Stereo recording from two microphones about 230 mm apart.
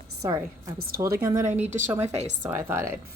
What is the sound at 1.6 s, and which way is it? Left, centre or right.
Speech, right.